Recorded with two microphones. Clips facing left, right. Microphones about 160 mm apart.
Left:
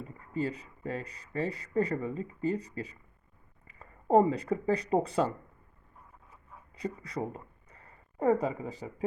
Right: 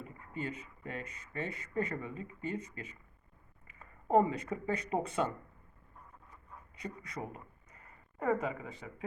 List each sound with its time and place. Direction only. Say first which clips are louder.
0.3 s speech: left 7 dB; 35° left (ahead or behind)
6.7 s speech: left 7 dB; 35° left (ahead or behind)